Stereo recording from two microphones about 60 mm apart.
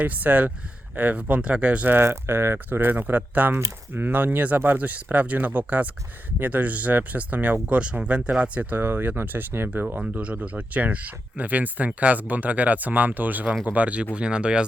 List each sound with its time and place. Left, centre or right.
0.0 s speech: right
2.0 s speech: right
8.7 s speech: right
10.0 s speech: right